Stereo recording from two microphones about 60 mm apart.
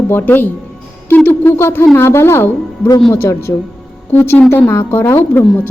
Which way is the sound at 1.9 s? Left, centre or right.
Left.